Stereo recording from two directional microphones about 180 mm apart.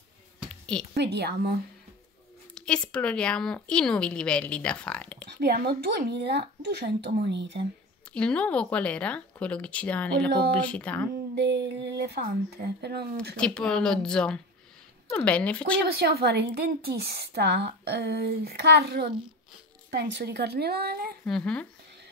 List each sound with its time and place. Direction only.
0.5 s a sound: 5° left (ahead or behind)
0.9 s speech: 70° right (ahead or behind)
2.5 s speech: 5° left (ahead or behind)
5.3 s speech: 65° right (ahead or behind)
8.1 s speech: 5° left (ahead or behind)
11.3 s a woman's voice: 70° right (ahead or behind)
13.4 s speech: 5° left (ahead or behind)
16.0 s a woman's voice: 60° right (ahead or behind)
21.3 s speech: 5° left (ahead or behind)